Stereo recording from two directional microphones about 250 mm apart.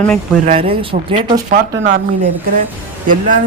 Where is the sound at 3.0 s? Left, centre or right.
Right.